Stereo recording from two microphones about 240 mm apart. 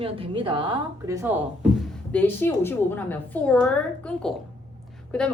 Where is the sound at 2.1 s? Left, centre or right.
Centre.